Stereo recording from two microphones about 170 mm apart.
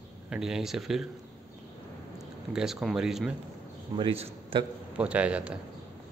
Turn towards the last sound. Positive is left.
turn(degrees=-5)  # may be behind; listen again after turning